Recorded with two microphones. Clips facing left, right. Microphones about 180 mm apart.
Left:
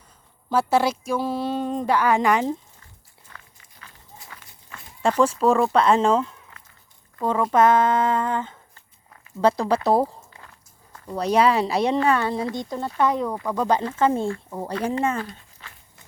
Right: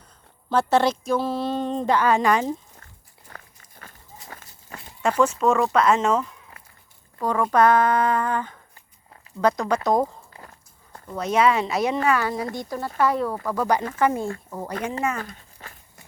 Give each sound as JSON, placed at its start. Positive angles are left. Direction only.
{"t": 0.5, "sound": "speech", "side_deg": 10}
{"t": 3.2, "sound": "pig", "side_deg": -45}
{"t": 4.3, "sound": "walk", "side_deg": -40}
{"t": 5.0, "sound": "speech", "side_deg": 30}
{"t": 11.2, "sound": "speech", "side_deg": 35}
{"t": 15.2, "sound": "a sound", "side_deg": -45}